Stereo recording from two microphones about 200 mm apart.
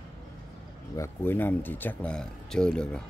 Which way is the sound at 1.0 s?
10° left (ahead or behind).